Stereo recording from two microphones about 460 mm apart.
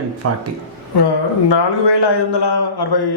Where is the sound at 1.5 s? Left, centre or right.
Left.